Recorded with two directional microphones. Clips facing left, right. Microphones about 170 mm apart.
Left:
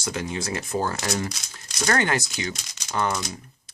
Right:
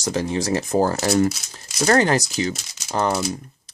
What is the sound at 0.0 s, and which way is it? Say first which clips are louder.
Speech: right 6 dB; 35° right (ahead or behind).